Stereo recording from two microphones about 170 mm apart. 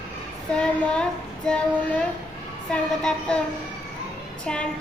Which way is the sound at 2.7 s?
5° left (ahead or behind).